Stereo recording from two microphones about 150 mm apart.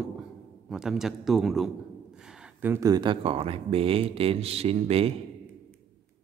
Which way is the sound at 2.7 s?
25° right (ahead or behind).